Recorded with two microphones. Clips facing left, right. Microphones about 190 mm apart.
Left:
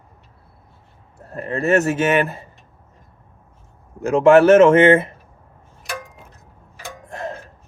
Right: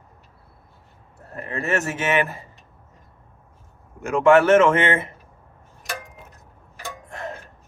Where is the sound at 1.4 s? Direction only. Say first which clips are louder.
Left 7 dB; 30° left (ahead or behind).